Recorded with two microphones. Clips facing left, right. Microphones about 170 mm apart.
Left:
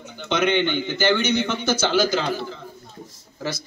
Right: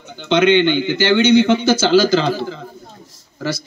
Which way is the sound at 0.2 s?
75° right (ahead or behind).